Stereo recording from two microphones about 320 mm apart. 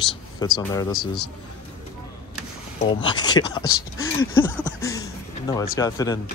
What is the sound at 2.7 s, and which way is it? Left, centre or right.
Speech, centre.